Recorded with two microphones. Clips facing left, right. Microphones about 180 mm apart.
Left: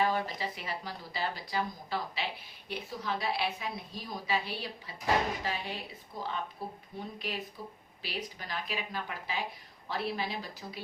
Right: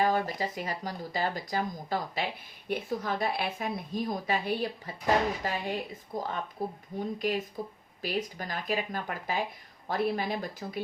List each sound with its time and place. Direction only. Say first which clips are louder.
0.0 s speech: right 3 dB; 45° right (ahead or behind)